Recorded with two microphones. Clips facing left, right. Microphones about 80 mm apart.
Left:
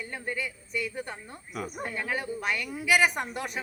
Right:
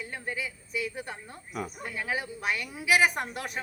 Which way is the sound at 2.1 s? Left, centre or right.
Centre.